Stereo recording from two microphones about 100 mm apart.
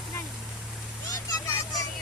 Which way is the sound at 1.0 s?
35° left (ahead or behind).